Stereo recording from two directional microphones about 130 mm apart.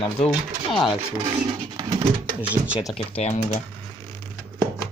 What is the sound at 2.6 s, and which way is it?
Speech, 45° right (ahead or behind).